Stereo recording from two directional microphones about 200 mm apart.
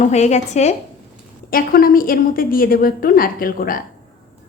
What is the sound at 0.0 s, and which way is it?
Speech, 35° left (ahead or behind).